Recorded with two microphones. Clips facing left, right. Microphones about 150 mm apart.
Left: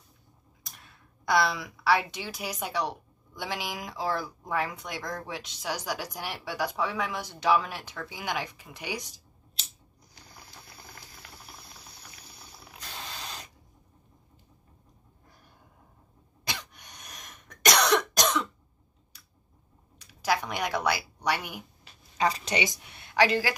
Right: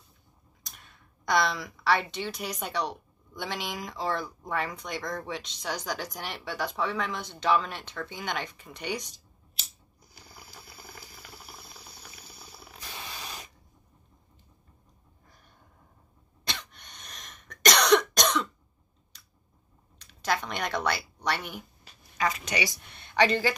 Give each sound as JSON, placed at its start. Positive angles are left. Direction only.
{"t": 0.7, "sound": "a woman's voice", "side_deg": 5}
{"t": 10.1, "sound": "boiling", "side_deg": -5}
{"t": 16.4, "sound": "cough", "side_deg": 10}
{"t": 20.0, "sound": "a sound", "side_deg": 10}
{"t": 22.1, "sound": "a woman's voice", "side_deg": 30}
{"t": 22.7, "sound": "speech", "side_deg": 10}